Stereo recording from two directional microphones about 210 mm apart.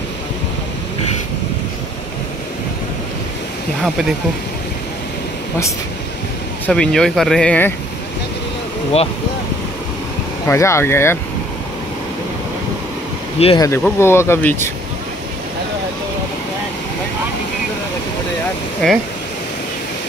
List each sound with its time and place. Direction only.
6.6 s speech: 5° left (ahead or behind)
10.4 s speech: 10° left (ahead or behind)
13.4 s speech: 25° left (ahead or behind)
13.7 s speech: 10° left (ahead or behind)
18.8 s speech: 5° left (ahead or behind)